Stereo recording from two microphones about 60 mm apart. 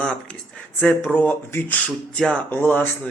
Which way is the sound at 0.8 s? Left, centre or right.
Left.